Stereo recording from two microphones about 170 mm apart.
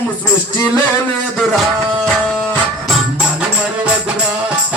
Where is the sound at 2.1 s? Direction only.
Centre (ahead or behind).